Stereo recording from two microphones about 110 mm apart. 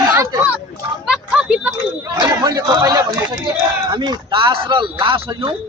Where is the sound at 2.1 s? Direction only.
40° right (ahead or behind).